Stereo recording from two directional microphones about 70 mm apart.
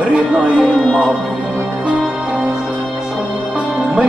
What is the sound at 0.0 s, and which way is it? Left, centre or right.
Speech, centre.